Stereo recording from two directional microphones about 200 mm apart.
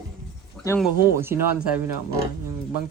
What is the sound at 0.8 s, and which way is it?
Speech, 10° right (ahead or behind).